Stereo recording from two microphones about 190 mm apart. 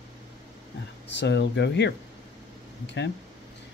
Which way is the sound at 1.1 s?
65° left (ahead or behind).